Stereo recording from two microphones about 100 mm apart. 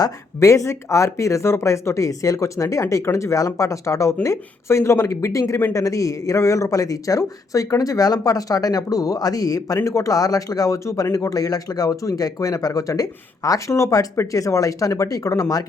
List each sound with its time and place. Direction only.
0.0 s speech: 30° left (ahead or behind)